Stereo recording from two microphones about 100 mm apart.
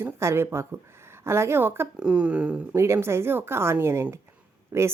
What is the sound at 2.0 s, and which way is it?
Speech, 10° right (ahead or behind).